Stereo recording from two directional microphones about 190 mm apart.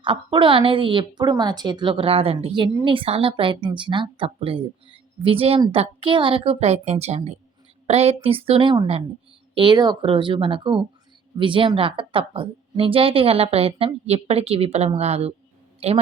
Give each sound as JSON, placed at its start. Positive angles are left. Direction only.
{"t": 0.0, "sound": "a woman's voice", "side_deg": -25}